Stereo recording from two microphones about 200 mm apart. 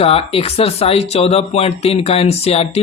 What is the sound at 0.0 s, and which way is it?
Speech, 30° left (ahead or behind).